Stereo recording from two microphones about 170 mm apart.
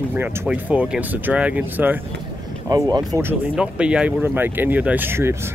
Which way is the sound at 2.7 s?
25° right (ahead or behind).